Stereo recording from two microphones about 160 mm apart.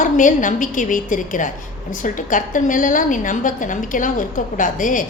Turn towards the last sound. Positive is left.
turn(degrees=55)  # may be behind; listen again after turning